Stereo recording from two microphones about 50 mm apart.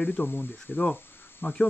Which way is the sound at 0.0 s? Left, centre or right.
Left.